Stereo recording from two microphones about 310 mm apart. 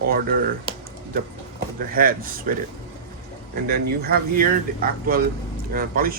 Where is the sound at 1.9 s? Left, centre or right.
Right.